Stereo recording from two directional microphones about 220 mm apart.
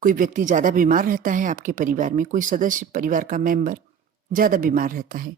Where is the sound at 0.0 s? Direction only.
40° right (ahead or behind).